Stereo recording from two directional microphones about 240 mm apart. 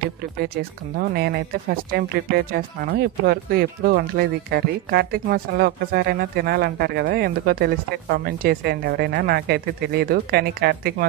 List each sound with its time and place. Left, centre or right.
0.9 s speech: right